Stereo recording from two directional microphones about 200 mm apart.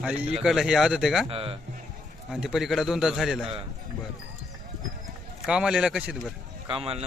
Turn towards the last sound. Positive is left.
turn(degrees=-30)  # may be behind; listen again after turning